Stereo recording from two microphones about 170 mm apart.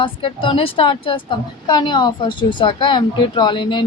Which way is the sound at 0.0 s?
30° left (ahead or behind).